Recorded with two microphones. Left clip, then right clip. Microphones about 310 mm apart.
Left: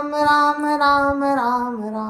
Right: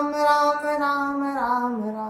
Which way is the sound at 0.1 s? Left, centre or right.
Left.